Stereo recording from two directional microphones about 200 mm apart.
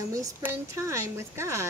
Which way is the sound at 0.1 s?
15° right (ahead or behind).